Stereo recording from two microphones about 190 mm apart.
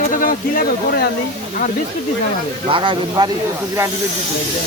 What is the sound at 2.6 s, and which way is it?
Speech, 25° right (ahead or behind).